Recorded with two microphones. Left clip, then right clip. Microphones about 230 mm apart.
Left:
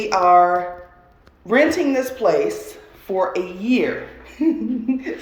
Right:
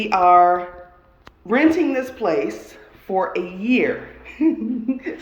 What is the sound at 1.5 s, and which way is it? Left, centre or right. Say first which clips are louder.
Speech: left 1 dB; centre.